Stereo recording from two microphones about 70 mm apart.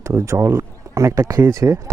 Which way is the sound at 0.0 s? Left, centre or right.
Right.